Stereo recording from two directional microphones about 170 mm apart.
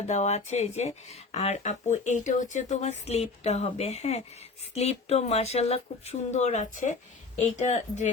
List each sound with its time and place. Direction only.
0.1 s speech: 40° left (ahead or behind)